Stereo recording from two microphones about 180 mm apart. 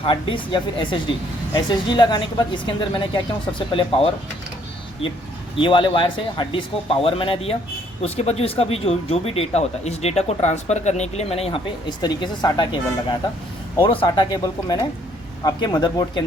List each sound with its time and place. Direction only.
0.0 s speech: 30° left (ahead or behind)
5.5 s speech: 25° left (ahead or behind)